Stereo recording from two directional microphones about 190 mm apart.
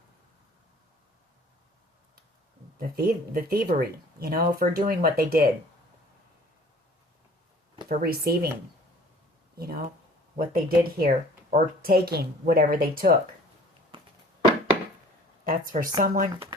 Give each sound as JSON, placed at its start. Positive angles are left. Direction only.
{"t": 2.7, "sound": "speech", "side_deg": -50}
{"t": 7.9, "sound": "speech", "side_deg": -50}
{"t": 9.6, "sound": "speech", "side_deg": -55}
{"t": 13.9, "sound": "a sound", "side_deg": -25}
{"t": 15.4, "sound": "speech", "side_deg": -45}
{"t": 16.3, "sound": "speech", "side_deg": -20}